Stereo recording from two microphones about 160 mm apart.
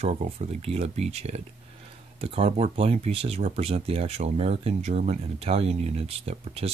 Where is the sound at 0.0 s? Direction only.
40° right (ahead or behind).